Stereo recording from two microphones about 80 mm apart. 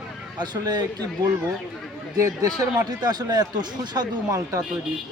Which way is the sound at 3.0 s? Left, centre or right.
Right.